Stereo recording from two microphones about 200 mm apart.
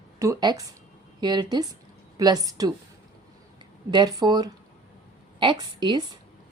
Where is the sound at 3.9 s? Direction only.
20° right (ahead or behind).